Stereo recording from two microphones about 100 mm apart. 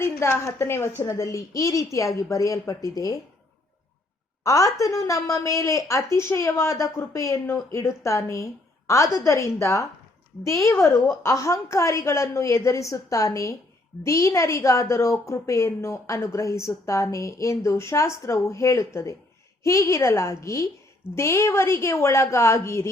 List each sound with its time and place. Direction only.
0.0 s a woman's voice: 25° left (ahead or behind)
4.4 s a woman's voice: 30° left (ahead or behind)